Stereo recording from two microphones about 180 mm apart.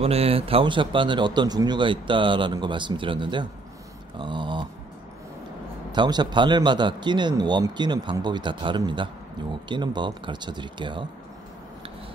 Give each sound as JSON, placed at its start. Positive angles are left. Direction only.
{"t": 0.0, "sound": "speech", "side_deg": -35}
{"t": 4.2, "sound": "a sound", "side_deg": -25}
{"t": 5.9, "sound": "speech", "side_deg": -25}